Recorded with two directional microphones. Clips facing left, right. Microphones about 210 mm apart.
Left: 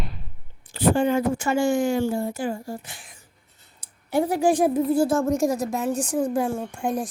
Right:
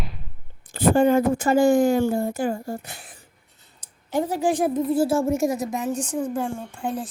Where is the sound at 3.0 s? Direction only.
30° right (ahead or behind).